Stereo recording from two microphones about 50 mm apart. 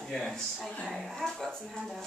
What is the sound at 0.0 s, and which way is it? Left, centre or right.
A woman's voice, centre.